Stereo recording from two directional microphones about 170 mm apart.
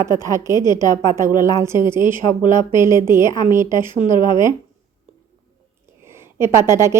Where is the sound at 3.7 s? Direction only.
30° left (ahead or behind).